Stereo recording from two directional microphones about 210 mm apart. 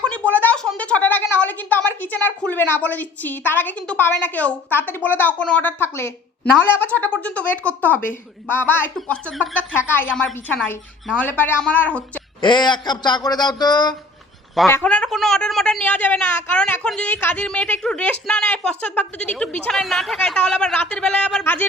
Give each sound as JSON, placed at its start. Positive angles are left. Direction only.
{"t": 0.0, "sound": "a sound", "side_deg": 5}
{"t": 2.0, "sound": "a woman's voice", "side_deg": 10}
{"t": 12.4, "sound": "speech", "side_deg": 20}
{"t": 14.7, "sound": "a woman's voice", "side_deg": 5}